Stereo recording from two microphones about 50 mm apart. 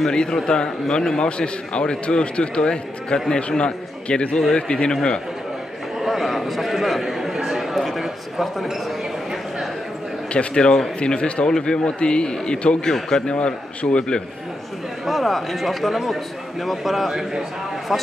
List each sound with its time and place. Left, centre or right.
0.0 s a man's voice: centre
5.9 s a sound: centre
10.3 s a man's voice: centre
15.0 s a man's voice: centre